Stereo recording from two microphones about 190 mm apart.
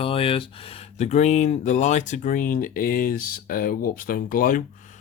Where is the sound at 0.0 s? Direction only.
30° left (ahead or behind).